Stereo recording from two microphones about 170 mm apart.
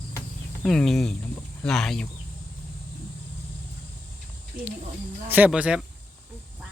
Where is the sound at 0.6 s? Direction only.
Centre (ahead or behind).